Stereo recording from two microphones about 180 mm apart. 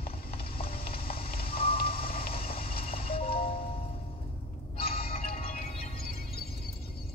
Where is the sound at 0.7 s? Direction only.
55° left (ahead or behind).